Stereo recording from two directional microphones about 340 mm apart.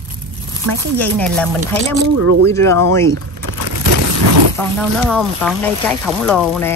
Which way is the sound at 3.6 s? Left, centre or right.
Right.